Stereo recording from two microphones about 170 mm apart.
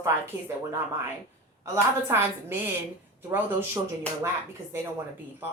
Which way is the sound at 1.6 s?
15° right (ahead or behind).